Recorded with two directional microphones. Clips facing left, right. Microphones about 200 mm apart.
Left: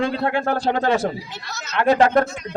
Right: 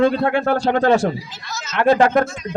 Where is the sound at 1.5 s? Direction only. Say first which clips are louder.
Right 5 dB; 60° left (ahead or behind).